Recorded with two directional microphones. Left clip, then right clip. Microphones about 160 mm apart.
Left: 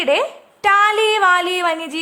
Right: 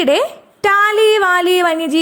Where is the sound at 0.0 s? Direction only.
30° right (ahead or behind).